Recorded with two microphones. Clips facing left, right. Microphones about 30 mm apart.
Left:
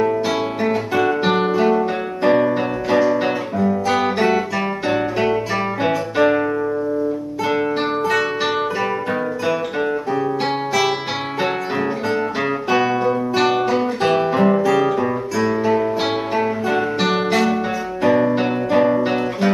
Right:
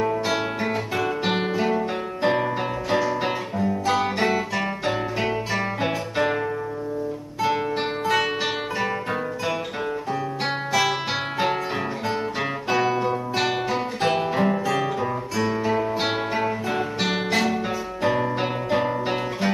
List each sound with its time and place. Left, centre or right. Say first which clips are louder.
0.0 s guitar: left 5 dB; centre
1.4 s music: left 7 dB; centre
2.2 s guitar: left 7 dB; centre
4.3 s music: left 5 dB; centre
12.6 s guitar: left 4 dB; centre
15.6 s music: left 5 dB; centre
18.7 s guitar: left 8 dB; centre